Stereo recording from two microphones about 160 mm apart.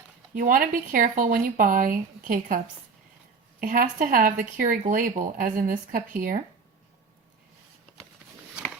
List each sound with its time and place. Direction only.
0.3 s speech: 60° right (ahead or behind)
3.6 s speech: 60° right (ahead or behind)